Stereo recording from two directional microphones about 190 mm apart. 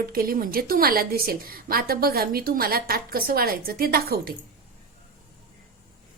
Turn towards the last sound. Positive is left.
turn(degrees=-55)  # may be behind; listen again after turning